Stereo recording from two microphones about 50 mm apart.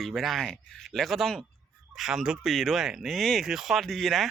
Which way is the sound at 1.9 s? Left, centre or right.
Centre.